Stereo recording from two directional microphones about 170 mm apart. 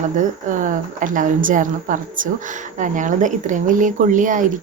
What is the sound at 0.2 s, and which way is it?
Speech, 50° right (ahead or behind).